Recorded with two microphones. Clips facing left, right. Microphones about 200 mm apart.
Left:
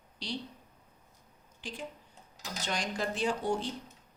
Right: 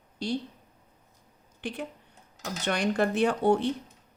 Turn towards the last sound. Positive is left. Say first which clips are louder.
# right 8 dB
turn(degrees=-60)  # may be behind; listen again after turning